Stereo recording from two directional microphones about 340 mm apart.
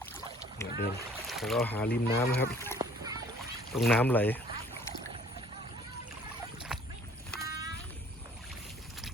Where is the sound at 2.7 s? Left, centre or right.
Centre.